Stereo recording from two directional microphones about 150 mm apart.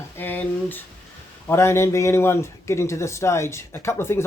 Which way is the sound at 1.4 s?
15° left (ahead or behind).